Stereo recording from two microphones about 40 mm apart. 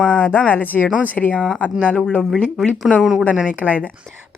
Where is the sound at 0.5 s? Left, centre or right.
Left.